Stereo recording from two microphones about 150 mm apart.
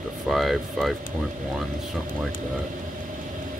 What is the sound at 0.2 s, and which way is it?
Speech, centre (ahead or behind).